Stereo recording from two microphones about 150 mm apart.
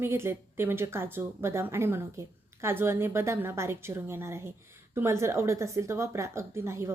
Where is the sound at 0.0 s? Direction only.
15° right (ahead or behind).